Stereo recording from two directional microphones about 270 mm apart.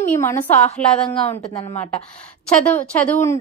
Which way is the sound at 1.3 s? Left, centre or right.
Centre.